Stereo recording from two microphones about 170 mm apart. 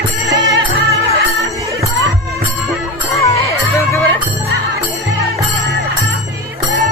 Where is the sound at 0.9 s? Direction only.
20° right (ahead or behind).